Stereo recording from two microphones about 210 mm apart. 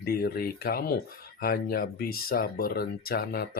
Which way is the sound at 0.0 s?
45° left (ahead or behind).